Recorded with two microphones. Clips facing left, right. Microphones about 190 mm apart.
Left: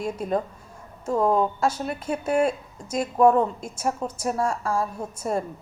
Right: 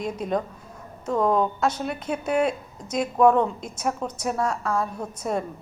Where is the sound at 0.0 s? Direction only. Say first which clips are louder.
Even; 5° left (ahead or behind).